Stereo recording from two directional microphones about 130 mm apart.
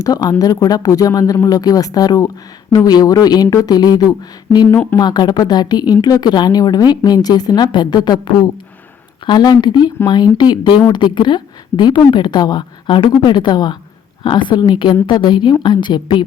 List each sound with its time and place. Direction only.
0.0 s a woman's voice: 30° left (ahead or behind)
4.7 s speech: 15° left (ahead or behind)
4.9 s a woman's voice: 35° left (ahead or behind)